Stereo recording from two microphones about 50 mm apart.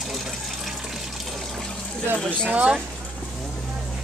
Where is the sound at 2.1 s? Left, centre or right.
Centre.